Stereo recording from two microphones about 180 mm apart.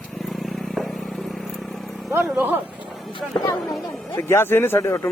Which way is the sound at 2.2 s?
5° right (ahead or behind).